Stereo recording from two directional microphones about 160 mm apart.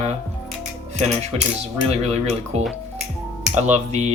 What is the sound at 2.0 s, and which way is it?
Speech, 40° right (ahead or behind).